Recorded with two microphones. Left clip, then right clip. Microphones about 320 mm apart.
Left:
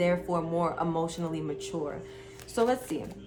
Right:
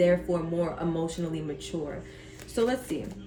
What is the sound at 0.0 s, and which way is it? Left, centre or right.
Speech, centre.